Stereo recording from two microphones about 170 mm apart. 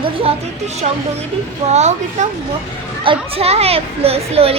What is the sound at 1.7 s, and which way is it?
Speech, 40° right (ahead or behind).